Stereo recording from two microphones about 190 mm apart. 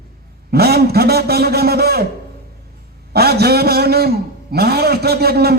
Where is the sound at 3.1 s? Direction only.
55° right (ahead or behind).